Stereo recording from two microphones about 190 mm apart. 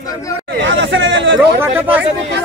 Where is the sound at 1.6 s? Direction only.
10° right (ahead or behind).